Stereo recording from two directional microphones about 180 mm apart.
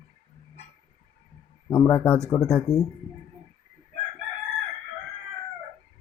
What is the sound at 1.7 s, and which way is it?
Speech, 10° left (ahead or behind).